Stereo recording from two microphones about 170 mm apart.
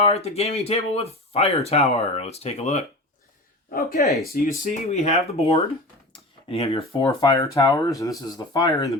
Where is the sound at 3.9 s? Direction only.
40° left (ahead or behind).